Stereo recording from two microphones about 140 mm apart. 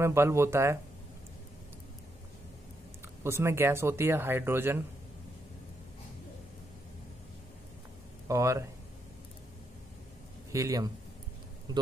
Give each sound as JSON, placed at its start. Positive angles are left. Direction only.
{"t": 0.0, "sound": "speech", "side_deg": -20}
{"t": 3.3, "sound": "speech", "side_deg": -20}
{"t": 8.3, "sound": "speech", "side_deg": -20}
{"t": 10.5, "sound": "speech", "side_deg": -25}